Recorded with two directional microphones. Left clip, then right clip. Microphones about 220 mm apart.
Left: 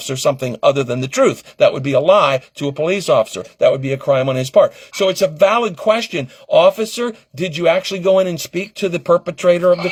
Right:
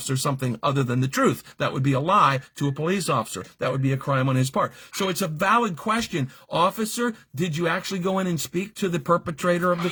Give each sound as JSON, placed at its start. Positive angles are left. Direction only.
{"t": 0.1, "sound": "speech", "side_deg": -25}